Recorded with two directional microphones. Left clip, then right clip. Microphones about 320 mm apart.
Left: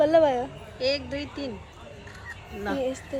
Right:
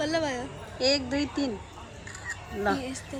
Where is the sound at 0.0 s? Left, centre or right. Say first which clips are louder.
Left 9 dB; centre.